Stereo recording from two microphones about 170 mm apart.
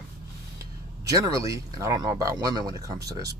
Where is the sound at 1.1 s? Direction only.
20° right (ahead or behind).